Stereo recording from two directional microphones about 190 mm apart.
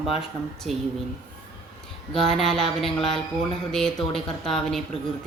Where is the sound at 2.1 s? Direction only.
Centre (ahead or behind).